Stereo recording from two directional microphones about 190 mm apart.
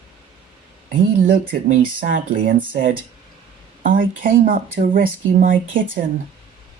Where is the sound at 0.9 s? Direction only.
50° right (ahead or behind).